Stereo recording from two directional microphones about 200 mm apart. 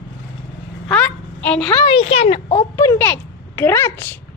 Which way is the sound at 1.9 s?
30° left (ahead or behind).